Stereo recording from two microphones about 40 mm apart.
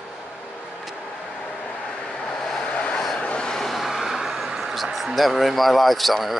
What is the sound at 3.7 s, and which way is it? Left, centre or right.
Vehicle, centre.